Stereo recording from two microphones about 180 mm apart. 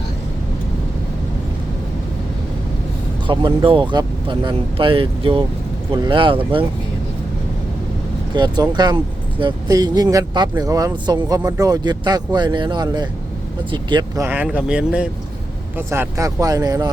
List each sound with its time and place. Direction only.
3.2 s speech: 30° right (ahead or behind)
8.4 s speech: 25° right (ahead or behind)
14.2 s speech: 10° right (ahead or behind)
15.9 s speech: 15° right (ahead or behind)